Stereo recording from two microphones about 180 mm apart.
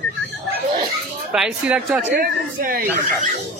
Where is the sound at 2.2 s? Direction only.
55° right (ahead or behind).